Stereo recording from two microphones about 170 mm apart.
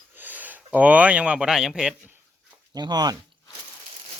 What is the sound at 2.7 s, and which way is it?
Speech, 25° right (ahead or behind).